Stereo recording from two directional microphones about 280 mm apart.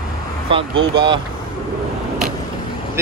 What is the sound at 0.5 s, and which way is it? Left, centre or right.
Speech, centre.